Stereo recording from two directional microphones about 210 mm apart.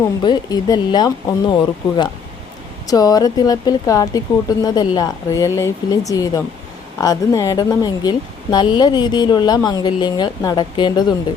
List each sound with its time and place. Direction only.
0.2 s a woman's voice: 20° left (ahead or behind)